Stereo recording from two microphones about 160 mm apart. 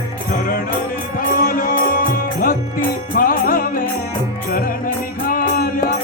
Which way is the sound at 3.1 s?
65° left (ahead or behind).